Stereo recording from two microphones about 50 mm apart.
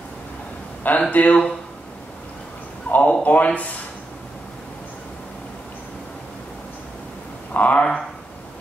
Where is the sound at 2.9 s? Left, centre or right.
Left.